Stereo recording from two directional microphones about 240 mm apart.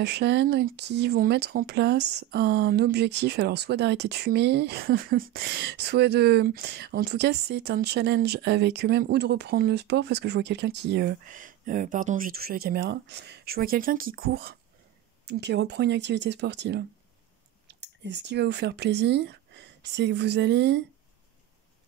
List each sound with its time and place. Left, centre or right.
0.0 s speech: right